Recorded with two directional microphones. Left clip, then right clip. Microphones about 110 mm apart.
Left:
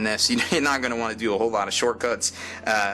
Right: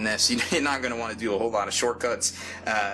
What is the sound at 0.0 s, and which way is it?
Speech, 25° left (ahead or behind).